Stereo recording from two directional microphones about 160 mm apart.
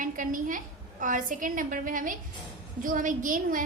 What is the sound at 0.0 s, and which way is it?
A woman's voice, 55° right (ahead or behind).